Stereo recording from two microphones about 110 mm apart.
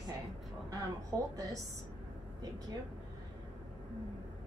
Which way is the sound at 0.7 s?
30° right (ahead or behind).